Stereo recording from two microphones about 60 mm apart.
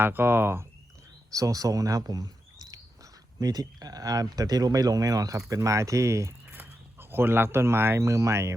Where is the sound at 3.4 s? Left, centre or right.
Right.